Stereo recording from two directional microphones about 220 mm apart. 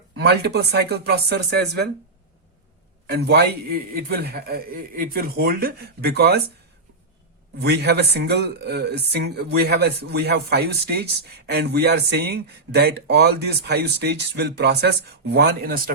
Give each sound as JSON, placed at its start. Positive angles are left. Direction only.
{"t": 0.2, "sound": "speech", "side_deg": -50}
{"t": 3.1, "sound": "speech", "side_deg": -50}
{"t": 7.6, "sound": "speech", "side_deg": -50}